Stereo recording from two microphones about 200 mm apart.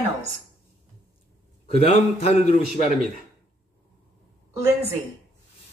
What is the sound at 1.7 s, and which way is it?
A man's voice, 30° left (ahead or behind).